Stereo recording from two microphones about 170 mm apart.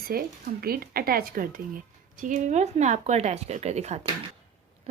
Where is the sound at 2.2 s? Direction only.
45° right (ahead or behind).